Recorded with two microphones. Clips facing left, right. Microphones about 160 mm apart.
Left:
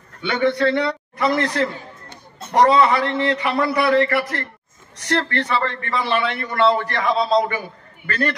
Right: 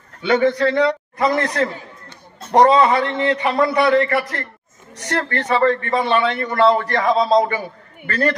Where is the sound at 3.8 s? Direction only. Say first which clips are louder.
Left 2 dB; 30° left (ahead or behind).